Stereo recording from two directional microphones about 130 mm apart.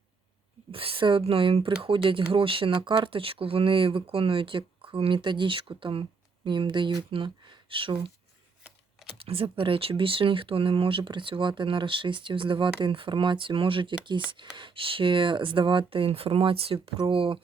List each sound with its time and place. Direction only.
0.7 s speech: 45° right (ahead or behind)
9.1 s speech: 45° right (ahead or behind)